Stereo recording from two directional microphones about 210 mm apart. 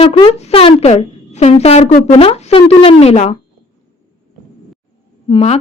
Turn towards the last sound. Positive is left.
turn(degrees=30)  # may be behind; listen again after turning